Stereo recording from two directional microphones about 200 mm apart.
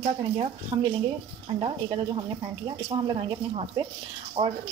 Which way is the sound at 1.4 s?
25° right (ahead or behind).